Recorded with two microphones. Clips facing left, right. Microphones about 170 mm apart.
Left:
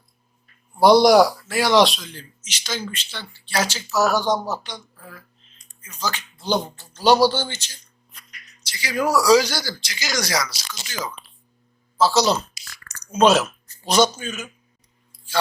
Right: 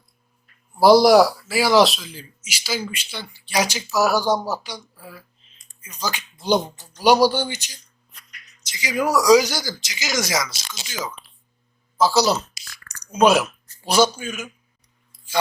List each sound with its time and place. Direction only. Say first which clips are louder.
0.8 s a man's voice: right 1 dB; centre (ahead or behind)